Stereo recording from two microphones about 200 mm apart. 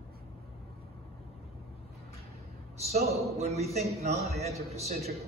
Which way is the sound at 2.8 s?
30° right (ahead or behind).